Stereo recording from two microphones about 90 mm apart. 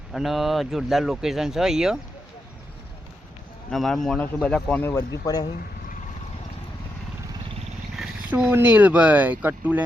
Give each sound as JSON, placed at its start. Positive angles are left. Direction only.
{"t": 0.1, "sound": "speech", "side_deg": 0}
{"t": 3.7, "sound": "speech", "side_deg": 5}
{"t": 5.2, "sound": "speech", "side_deg": 40}
{"t": 8.3, "sound": "speech", "side_deg": -20}